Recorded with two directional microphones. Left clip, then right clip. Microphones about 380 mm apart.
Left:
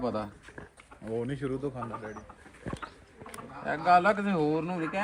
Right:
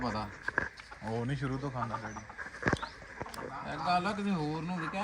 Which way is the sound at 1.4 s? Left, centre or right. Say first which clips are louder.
Left 4 dB; centre.